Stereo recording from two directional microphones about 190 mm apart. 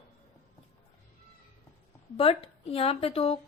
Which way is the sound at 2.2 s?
30° left (ahead or behind).